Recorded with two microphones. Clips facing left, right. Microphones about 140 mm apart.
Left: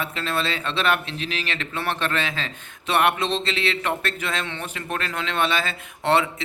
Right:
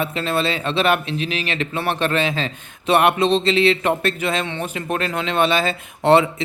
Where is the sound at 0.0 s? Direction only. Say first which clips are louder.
Right 5 dB; 15° right (ahead or behind).